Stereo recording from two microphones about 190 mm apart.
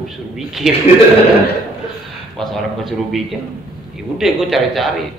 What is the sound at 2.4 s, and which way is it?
A man's voice, centre (ahead or behind).